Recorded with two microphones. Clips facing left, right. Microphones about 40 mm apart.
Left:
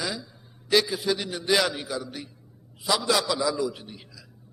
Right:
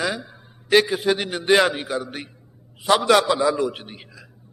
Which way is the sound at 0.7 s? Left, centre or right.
Right.